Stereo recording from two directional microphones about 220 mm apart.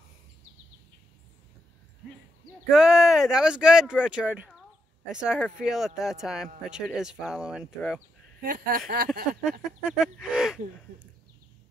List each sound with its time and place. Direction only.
2.7 s speech: centre (ahead or behind)
8.4 s speech: 45° right (ahead or behind)
9.6 s speech: 5° right (ahead or behind)